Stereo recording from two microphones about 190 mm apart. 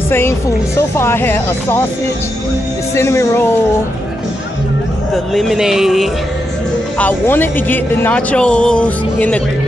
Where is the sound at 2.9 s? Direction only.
15° left (ahead or behind).